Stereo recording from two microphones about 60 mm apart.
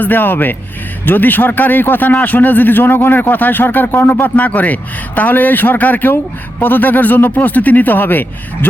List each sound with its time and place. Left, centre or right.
0.0 s speech: left